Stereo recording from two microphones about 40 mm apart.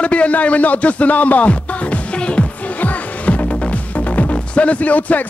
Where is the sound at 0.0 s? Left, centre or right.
Left.